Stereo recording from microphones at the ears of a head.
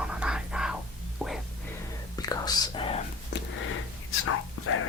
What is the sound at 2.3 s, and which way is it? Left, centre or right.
Whispering, left.